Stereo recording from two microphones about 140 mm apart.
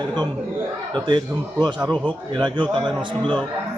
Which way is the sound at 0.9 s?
35° right (ahead or behind).